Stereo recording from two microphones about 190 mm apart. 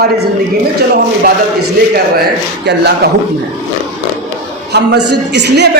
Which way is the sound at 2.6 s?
60° right (ahead or behind).